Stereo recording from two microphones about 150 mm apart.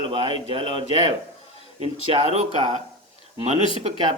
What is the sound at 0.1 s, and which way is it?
Speech, 40° right (ahead or behind).